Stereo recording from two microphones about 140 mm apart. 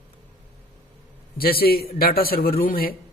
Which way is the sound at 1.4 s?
90° left.